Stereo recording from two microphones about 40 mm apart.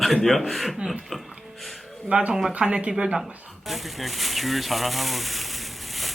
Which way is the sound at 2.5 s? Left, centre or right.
Right.